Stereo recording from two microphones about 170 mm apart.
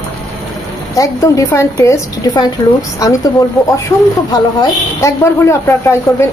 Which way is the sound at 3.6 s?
20° left (ahead or behind).